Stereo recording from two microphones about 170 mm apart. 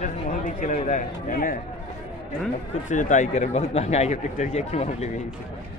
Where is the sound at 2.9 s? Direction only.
45° left (ahead or behind).